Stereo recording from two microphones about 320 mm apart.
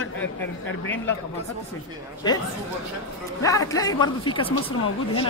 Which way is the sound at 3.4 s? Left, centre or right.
Centre.